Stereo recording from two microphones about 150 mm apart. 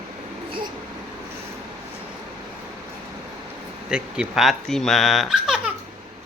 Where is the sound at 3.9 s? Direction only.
5° right (ahead or behind).